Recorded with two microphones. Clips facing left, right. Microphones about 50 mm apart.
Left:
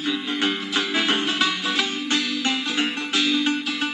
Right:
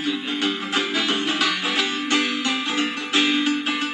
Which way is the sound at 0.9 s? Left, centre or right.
Left.